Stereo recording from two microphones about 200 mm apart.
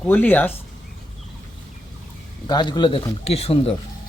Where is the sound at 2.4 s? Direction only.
20° left (ahead or behind).